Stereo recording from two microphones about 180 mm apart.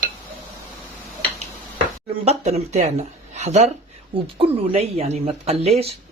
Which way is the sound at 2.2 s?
35° right (ahead or behind).